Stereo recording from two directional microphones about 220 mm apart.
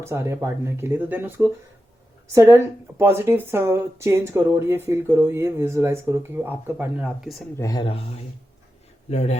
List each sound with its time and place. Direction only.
0.0 s speech: 10° right (ahead or behind)
7.5 s speech: 15° left (ahead or behind)